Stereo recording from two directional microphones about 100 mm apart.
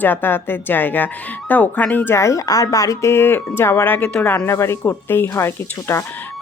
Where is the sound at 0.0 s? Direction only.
20° left (ahead or behind).